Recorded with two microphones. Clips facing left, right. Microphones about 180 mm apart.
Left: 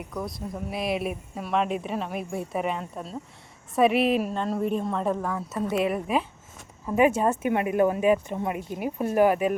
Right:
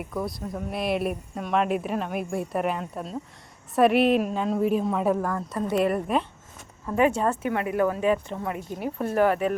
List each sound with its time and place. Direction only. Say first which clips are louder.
0.0 s speech: right 2 dB; centre (ahead or behind)
5.3 s speech: right 1 dB; 5° left (ahead or behind)
6.8 s speech: left 1 dB; 10° left (ahead or behind)